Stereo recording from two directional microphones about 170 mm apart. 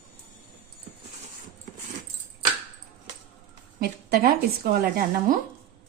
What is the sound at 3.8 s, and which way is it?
Speech, 65° right (ahead or behind).